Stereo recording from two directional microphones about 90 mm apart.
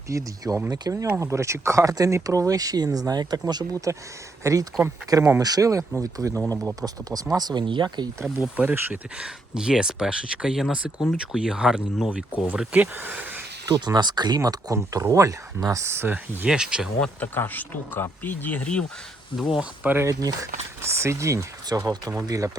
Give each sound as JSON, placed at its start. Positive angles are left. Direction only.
{"t": 0.1, "sound": "speech", "side_deg": -40}
{"t": 4.4, "sound": "speech", "side_deg": -35}
{"t": 8.6, "sound": "speech", "side_deg": -25}
{"t": 9.1, "sound": "speech", "side_deg": -10}
{"t": 12.5, "sound": "speech", "side_deg": -20}
{"t": 13.7, "sound": "speech", "side_deg": -50}
{"t": 17.0, "sound": "speech", "side_deg": 20}
{"t": 19.4, "sound": "speech", "side_deg": -5}
{"t": 19.8, "sound": "speech", "side_deg": -20}
{"t": 20.1, "sound": "speech", "side_deg": -40}